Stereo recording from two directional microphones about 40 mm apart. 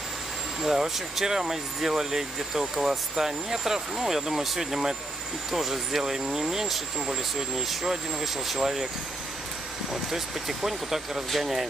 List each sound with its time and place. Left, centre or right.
0.6 s speech: centre
10.1 s speech: centre